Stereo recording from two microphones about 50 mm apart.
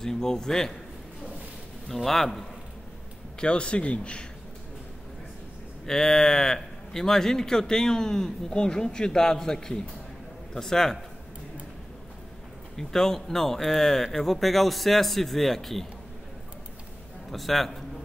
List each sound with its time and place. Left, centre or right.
0.0 s speech: centre
1.9 s speech: centre
3.3 s speech: left
5.9 s speech: centre
12.7 s speech: centre
17.3 s a man's voice: centre